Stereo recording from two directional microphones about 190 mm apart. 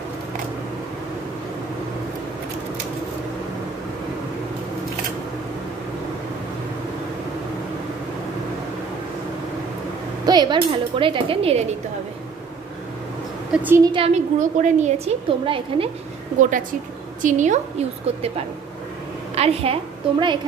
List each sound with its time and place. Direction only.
10.2 s speech: 20° right (ahead or behind)
13.5 s a sound: 5° right (ahead or behind)
13.9 s a woman's voice: 35° right (ahead or behind)
16.3 s a woman's voice: 40° right (ahead or behind)
19.3 s a woman's voice: 30° right (ahead or behind)